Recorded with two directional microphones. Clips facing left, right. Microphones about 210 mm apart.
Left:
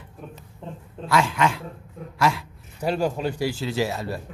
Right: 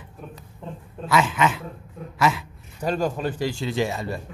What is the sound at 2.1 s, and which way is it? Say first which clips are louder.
Dog: right 1 dB; centre (ahead or behind).